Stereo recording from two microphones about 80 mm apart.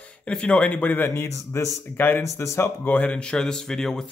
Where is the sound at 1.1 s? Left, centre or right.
Left.